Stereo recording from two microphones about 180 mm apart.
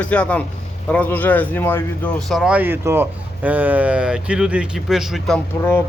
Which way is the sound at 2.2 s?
Centre (ahead or behind).